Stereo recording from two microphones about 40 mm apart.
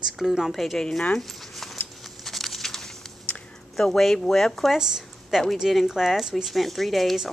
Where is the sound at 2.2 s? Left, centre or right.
Centre.